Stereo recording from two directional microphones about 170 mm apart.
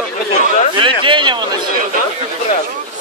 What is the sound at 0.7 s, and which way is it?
Speech, 30° right (ahead or behind).